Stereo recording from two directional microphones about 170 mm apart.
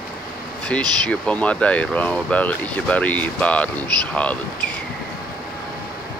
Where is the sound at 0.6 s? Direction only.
5° left (ahead or behind).